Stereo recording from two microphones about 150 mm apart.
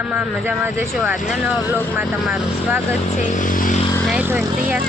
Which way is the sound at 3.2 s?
60° left (ahead or behind).